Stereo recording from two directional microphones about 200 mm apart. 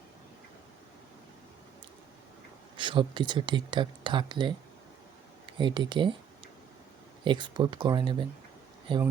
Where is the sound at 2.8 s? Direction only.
25° right (ahead or behind).